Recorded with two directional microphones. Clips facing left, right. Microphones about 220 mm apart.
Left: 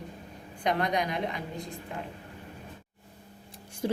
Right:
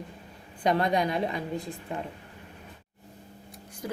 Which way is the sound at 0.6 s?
30° right (ahead or behind).